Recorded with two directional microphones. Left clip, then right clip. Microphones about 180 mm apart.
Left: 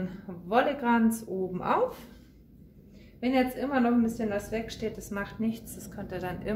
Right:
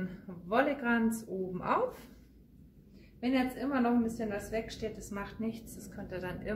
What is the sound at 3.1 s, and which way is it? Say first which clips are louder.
A woman's voice: left 5 dB; 30° left (ahead or behind).